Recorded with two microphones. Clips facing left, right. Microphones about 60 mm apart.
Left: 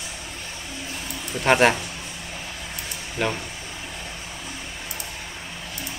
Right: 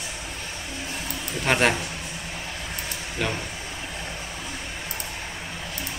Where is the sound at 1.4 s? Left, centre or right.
Centre.